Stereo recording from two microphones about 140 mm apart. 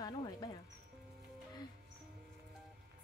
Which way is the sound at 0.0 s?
30° left (ahead or behind).